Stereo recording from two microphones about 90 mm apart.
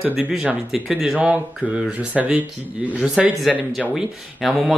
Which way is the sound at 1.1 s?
15° right (ahead or behind).